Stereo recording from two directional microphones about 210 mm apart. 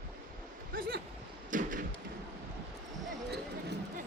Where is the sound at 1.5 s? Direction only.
40° right (ahead or behind).